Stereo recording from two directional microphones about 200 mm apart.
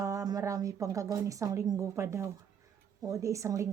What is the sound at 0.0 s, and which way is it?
A woman's voice, 15° right (ahead or behind).